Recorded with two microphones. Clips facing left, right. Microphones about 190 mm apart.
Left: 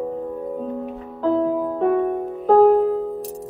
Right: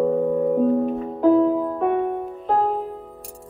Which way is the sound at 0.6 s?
45° right (ahead or behind).